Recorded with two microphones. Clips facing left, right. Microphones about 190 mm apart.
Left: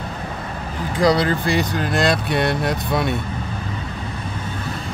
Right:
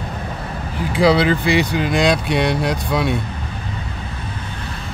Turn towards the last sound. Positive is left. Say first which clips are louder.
# right 1 dB
turn(degrees=0)  # may be behind; listen again after turning